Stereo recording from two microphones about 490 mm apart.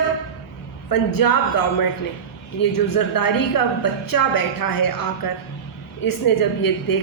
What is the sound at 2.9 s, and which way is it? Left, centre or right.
A woman's voice, left.